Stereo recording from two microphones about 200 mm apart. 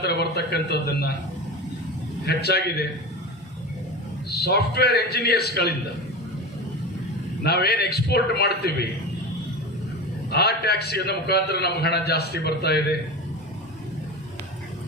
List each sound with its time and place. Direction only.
0.0 s a man's voice: 55° left (ahead or behind)
2.2 s a man's voice: 55° left (ahead or behind)
4.3 s a man's voice: 55° left (ahead or behind)
7.4 s a man's voice: 55° left (ahead or behind)
10.3 s a man's voice: 55° left (ahead or behind)